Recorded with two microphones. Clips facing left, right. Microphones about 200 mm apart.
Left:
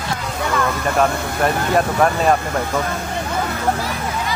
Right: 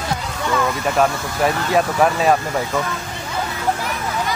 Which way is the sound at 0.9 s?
Centre (ahead or behind).